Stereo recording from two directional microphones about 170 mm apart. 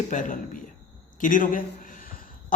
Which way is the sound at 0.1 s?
50° left (ahead or behind).